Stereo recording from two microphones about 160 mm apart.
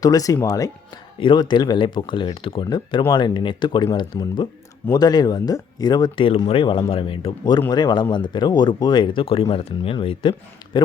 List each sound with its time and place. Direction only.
0.0 s speech: 20° left (ahead or behind)